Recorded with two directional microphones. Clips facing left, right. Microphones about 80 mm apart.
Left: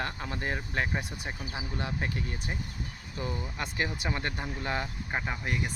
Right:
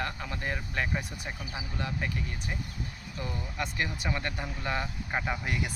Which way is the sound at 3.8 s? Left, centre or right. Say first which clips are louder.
Left 1 dB; left.